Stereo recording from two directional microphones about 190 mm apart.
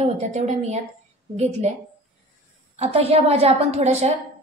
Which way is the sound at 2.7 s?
30° right (ahead or behind).